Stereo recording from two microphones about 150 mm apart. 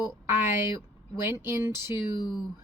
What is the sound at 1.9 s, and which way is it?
Speech, 30° left (ahead or behind).